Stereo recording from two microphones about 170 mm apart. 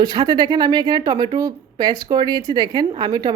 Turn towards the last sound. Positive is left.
turn(degrees=-25)  # may be behind; listen again after turning